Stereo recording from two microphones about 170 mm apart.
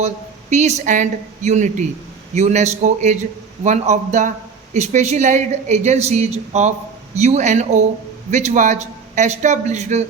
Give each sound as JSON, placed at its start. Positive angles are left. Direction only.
{"t": 0.5, "sound": "a woman's voice", "side_deg": -40}